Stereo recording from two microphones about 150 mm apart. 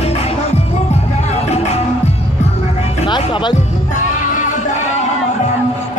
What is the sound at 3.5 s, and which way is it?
Music, 55° left (ahead or behind).